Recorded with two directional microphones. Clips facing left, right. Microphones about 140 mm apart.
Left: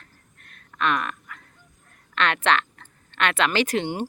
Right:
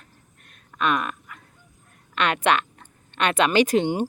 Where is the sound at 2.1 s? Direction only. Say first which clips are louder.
Right 1 dB; 15° right (ahead or behind).